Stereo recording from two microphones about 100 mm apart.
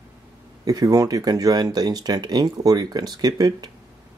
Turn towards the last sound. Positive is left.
turn(degrees=-40)  # may be behind; listen again after turning